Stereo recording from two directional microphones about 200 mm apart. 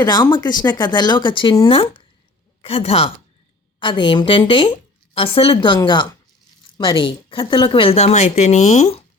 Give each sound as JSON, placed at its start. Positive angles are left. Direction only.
{"t": 0.0, "sound": "a woman's voice", "side_deg": 20}